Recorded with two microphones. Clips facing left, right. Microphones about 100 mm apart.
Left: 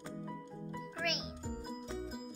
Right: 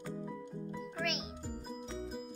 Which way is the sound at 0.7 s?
Centre (ahead or behind).